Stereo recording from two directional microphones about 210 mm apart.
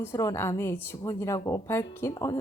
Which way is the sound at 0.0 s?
15° left (ahead or behind).